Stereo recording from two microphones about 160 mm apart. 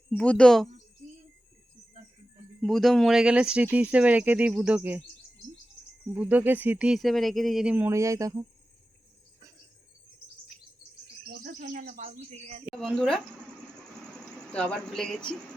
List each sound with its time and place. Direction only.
0.1 s speech: 5° left (ahead or behind)
2.6 s speech: centre (ahead or behind)
6.1 s speech: 10° right (ahead or behind)
11.4 s speech: 60° right (ahead or behind); by 12.6 s 45° right (ahead or behind)
12.7 s speech: 5° left (ahead or behind)
14.5 s speech: 5° left (ahead or behind)